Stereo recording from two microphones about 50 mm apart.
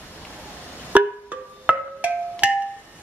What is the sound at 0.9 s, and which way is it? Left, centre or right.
Music, right.